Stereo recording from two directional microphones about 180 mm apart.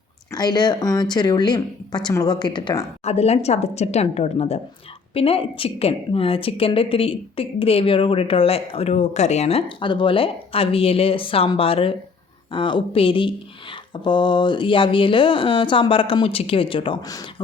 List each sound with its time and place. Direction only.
0.3 s speech: 25° left (ahead or behind)
3.0 s a woman's voice: 35° left (ahead or behind)